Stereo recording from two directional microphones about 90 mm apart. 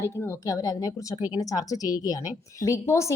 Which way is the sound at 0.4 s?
40° left (ahead or behind).